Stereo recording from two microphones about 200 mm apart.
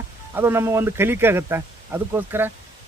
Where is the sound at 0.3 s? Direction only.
10° right (ahead or behind).